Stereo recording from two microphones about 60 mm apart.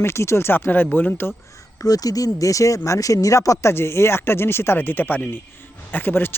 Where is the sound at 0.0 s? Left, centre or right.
Left.